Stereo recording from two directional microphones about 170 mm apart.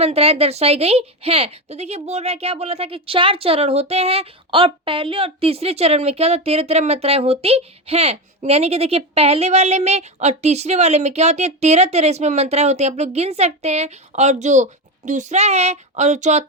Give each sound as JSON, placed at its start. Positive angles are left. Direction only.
{"t": 0.0, "sound": "a woman's voice", "side_deg": -35}